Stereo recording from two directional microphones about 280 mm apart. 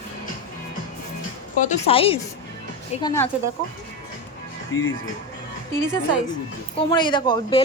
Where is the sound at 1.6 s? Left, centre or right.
Left.